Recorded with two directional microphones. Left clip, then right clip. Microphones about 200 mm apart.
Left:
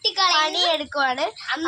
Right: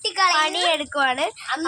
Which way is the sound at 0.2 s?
20° right (ahead or behind).